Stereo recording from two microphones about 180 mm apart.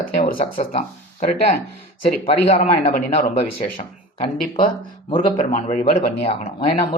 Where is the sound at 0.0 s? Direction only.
50° left (ahead or behind).